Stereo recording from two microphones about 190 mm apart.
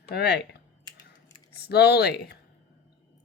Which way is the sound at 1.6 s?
60° left (ahead or behind).